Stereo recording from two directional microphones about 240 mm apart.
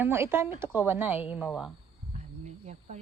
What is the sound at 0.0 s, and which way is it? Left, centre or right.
A woman's voice, centre.